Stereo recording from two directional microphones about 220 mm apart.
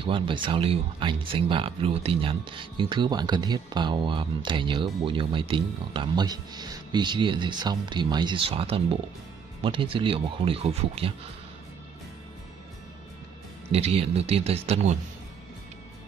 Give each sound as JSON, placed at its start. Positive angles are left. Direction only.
{"t": 0.0, "sound": "speech", "side_deg": -25}
{"t": 13.7, "sound": "speech", "side_deg": -25}